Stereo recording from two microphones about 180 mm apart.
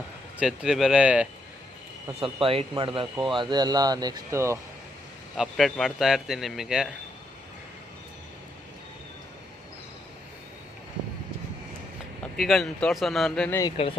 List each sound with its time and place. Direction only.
0.3 s a man's voice: 5° right (ahead or behind)
2.2 s speech: 30° right (ahead or behind)
5.4 s a man's voice: centre (ahead or behind)
12.4 s a man's voice: centre (ahead or behind)
13.8 s speech: 30° left (ahead or behind)